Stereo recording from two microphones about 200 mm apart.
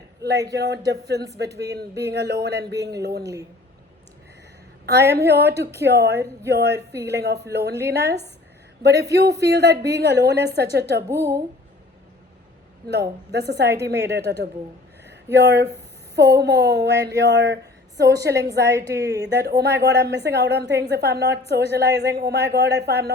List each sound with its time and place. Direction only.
0.5 s a woman's voice: 55° right (ahead or behind)
4.9 s a woman's voice: 55° right (ahead or behind)
9.4 s a woman's voice: 55° right (ahead or behind)
11.1 s a woman's voice: 15° right (ahead or behind)
12.9 s a woman's voice: 55° right (ahead or behind)
15.0 s a sound: 60° right (ahead or behind)
16.4 s a woman's voice: 55° right (ahead or behind)
18.6 s a woman's voice: 15° right (ahead or behind)
19.2 s a woman's voice: 55° right (ahead or behind)